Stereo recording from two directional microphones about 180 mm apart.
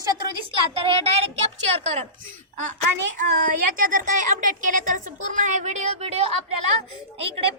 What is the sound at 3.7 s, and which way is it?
A woman's voice, 50° right (ahead or behind).